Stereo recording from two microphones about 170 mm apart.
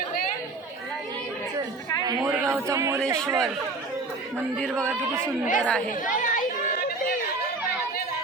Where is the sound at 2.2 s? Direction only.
10° right (ahead or behind).